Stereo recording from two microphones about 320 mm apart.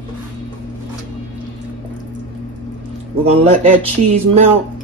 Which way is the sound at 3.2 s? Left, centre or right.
Centre.